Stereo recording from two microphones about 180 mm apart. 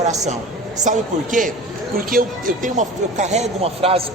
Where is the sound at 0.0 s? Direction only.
40° right (ahead or behind).